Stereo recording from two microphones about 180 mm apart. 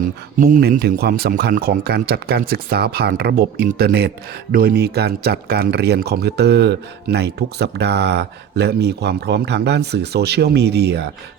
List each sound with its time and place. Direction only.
0.3 s speech: 50° right (ahead or behind); by 11.1 s 65° right (ahead or behind)